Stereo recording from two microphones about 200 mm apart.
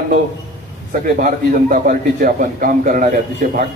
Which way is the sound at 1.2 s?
45° right (ahead or behind).